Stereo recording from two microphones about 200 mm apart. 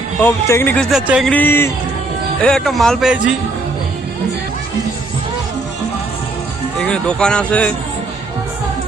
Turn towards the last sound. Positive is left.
turn(degrees=5)  # may be behind; listen again after turning